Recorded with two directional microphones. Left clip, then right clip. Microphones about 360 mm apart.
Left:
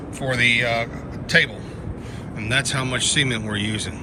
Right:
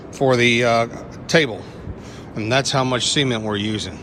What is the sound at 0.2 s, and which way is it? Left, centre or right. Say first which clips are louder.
Speech: right 3 dB; centre.